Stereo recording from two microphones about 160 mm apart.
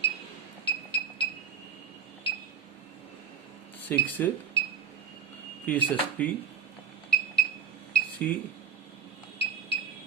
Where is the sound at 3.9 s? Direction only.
10° left (ahead or behind).